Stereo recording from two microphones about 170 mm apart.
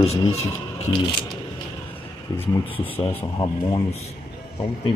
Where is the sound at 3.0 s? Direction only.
20° left (ahead or behind).